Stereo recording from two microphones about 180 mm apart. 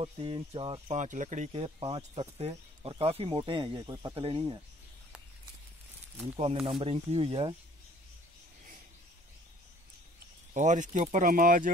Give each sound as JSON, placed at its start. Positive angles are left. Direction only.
{"t": 0.0, "sound": "speech", "side_deg": -30}
{"t": 6.3, "sound": "speech", "side_deg": -35}
{"t": 10.5, "sound": "speech", "side_deg": -45}